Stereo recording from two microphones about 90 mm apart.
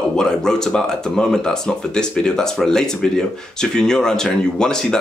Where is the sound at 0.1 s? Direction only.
5° left (ahead or behind).